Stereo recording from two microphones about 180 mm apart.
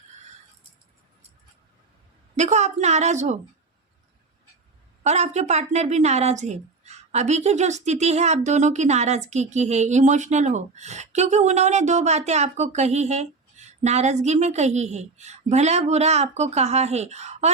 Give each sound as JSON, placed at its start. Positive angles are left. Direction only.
{"t": 2.3, "sound": "a woman's voice", "side_deg": -40}
{"t": 5.0, "sound": "a woman's voice", "side_deg": -40}